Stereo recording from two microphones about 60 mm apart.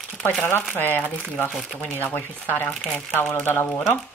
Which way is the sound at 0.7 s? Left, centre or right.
Left.